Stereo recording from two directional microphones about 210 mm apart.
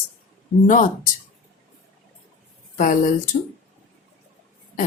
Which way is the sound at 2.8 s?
35° left (ahead or behind).